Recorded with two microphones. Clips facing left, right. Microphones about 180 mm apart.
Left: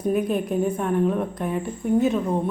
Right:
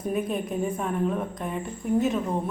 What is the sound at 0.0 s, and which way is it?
Speech, centre (ahead or behind).